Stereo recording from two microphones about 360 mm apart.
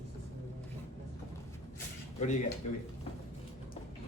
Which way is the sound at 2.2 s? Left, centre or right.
Left.